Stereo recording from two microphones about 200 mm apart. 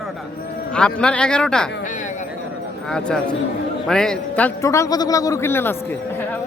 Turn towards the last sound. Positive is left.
turn(degrees=10)  # may be behind; listen again after turning